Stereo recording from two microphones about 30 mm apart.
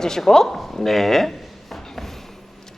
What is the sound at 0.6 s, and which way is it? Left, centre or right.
Drawer open or close, centre.